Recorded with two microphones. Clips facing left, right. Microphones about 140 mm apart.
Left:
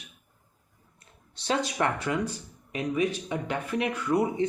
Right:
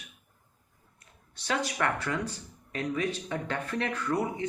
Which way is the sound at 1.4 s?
25° left (ahead or behind).